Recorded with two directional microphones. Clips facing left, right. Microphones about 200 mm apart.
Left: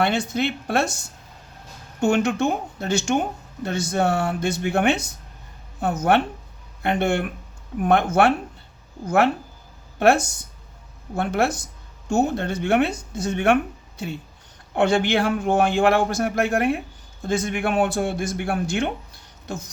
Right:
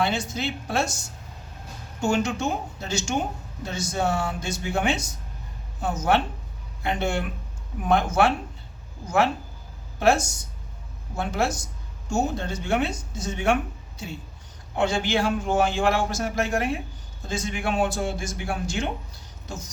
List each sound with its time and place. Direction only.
0.0 s speech: 60° left (ahead or behind)
2.0 s speech: 60° left (ahead or behind)
14.8 s speech: 60° left (ahead or behind)